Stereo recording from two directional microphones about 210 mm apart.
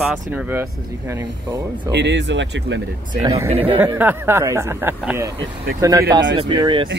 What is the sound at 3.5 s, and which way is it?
Speech, 25° right (ahead or behind).